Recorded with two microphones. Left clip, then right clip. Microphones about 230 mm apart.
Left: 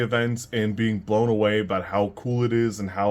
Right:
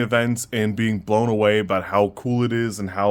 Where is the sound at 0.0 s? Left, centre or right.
Right.